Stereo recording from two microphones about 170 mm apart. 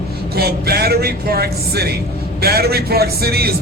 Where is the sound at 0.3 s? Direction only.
65° right (ahead or behind).